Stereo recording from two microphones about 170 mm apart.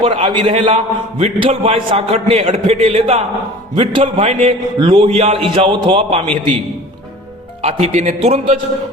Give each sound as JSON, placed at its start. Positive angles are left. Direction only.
{"t": 0.0, "sound": "a man's voice", "side_deg": -30}
{"t": 7.6, "sound": "a man's voice", "side_deg": -40}